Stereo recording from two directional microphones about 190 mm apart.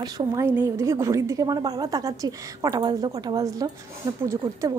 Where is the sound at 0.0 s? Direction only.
20° right (ahead or behind).